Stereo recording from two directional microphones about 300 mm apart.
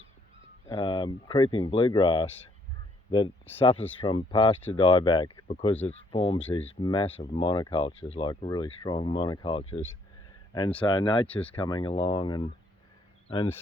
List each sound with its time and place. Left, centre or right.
0.7 s speech: centre